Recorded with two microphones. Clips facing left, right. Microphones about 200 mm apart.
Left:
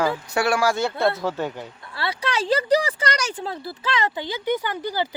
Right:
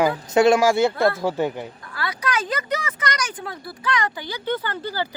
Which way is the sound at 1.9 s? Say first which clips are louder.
Even; 25° left (ahead or behind).